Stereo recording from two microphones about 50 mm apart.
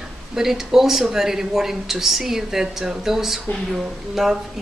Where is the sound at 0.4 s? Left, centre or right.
Centre.